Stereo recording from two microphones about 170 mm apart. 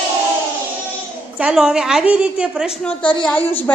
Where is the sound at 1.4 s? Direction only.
5° right (ahead or behind).